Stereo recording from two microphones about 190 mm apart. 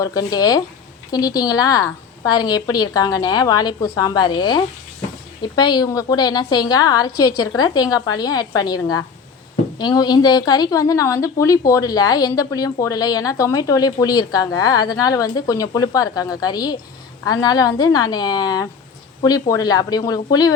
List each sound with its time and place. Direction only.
0.0 s a woman's voice: 20° left (ahead or behind)